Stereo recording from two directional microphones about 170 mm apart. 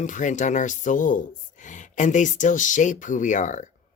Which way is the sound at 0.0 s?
45° left (ahead or behind).